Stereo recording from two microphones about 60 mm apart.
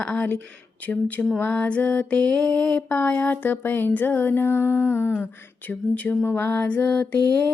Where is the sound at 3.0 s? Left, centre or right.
Left.